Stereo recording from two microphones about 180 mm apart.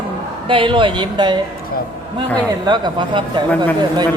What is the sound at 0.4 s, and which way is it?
Speech, 30° right (ahead or behind).